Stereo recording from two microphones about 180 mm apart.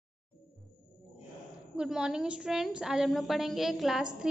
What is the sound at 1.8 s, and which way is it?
A woman's voice, 5° right (ahead or behind).